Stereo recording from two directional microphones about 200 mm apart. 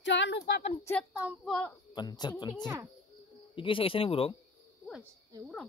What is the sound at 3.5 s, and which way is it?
Speech, 25° left (ahead or behind).